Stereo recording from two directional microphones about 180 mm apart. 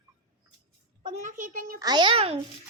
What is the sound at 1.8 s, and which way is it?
Speech, 25° right (ahead or behind).